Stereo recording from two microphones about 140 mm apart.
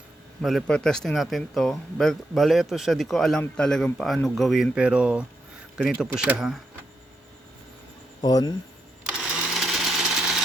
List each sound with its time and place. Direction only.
0.4 s speech: centre (ahead or behind)
8.2 s speech: 25° left (ahead or behind)
9.0 s sewing machine: 5° right (ahead or behind)